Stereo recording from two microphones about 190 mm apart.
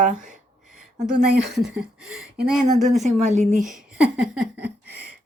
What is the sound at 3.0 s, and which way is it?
Speech, 40° right (ahead or behind).